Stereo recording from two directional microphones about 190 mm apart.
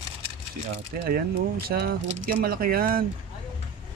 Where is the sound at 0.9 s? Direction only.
50° right (ahead or behind).